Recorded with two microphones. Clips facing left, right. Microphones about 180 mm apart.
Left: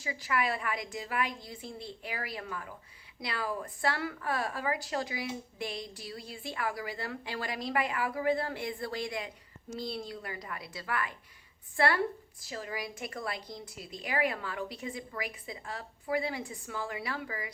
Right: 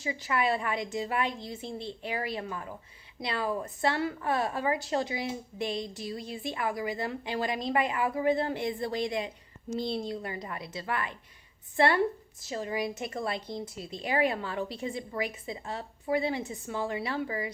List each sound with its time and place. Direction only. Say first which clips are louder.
0.0 s a woman's voice: right 3 dB; 25° right (ahead or behind)